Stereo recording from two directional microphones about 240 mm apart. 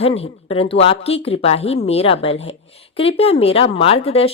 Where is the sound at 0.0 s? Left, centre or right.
Left.